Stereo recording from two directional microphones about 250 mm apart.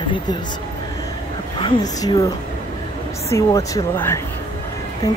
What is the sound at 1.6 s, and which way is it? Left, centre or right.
Speech, centre.